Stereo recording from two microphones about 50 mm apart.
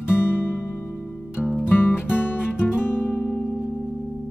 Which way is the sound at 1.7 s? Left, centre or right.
Left.